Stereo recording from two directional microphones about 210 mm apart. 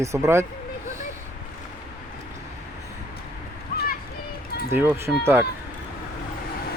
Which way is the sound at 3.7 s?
45° left (ahead or behind).